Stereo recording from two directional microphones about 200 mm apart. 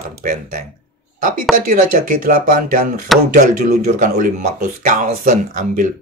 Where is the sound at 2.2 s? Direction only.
45° right (ahead or behind).